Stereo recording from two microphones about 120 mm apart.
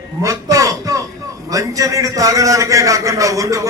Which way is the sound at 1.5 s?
30° right (ahead or behind).